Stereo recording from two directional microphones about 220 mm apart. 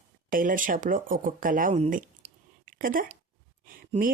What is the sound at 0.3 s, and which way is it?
Speech, 40° right (ahead or behind).